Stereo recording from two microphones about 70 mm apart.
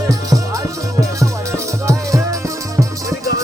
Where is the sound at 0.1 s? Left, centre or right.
Right.